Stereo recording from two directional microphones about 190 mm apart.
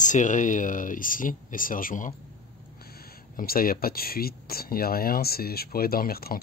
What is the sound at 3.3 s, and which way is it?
Speech, 50° left (ahead or behind).